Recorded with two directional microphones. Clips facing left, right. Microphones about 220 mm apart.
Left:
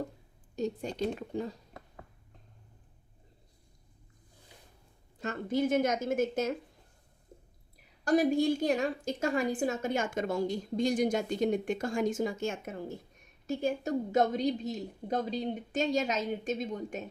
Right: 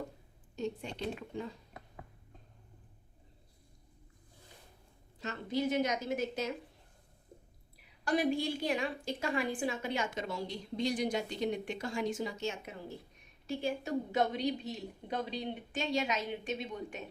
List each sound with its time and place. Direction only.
0.5 s a woman's voice: 40° left (ahead or behind)
5.2 s a woman's voice: 50° left (ahead or behind)
8.0 s a woman's voice: 45° left (ahead or behind)